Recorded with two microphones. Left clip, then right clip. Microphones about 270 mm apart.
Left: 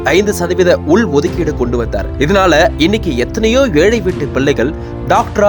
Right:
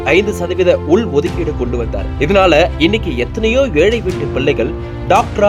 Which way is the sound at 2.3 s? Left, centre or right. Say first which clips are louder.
Even; left.